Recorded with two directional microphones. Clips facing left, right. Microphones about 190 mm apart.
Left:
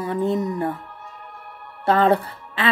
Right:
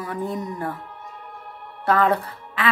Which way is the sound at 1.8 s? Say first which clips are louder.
Left 2 dB; 25° left (ahead or behind).